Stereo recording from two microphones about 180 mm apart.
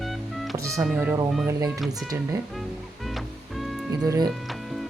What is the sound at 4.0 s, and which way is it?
Speech, 20° right (ahead or behind).